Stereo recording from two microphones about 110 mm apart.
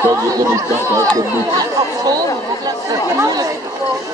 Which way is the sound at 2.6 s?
35° right (ahead or behind).